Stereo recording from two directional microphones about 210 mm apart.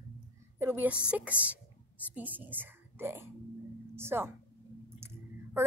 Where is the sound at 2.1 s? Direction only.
10° right (ahead or behind).